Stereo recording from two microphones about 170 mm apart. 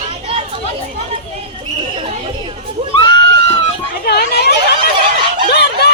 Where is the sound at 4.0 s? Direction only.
70° left (ahead or behind).